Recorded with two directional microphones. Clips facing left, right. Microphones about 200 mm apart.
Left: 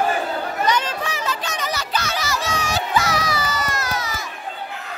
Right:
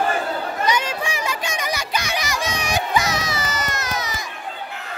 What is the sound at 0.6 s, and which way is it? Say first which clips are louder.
Children playing: even; 10° right (ahead or behind).